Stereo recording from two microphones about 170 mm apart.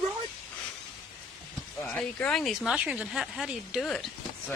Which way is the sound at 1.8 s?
Centre (ahead or behind).